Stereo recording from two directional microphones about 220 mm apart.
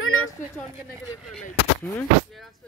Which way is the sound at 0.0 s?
70° left (ahead or behind).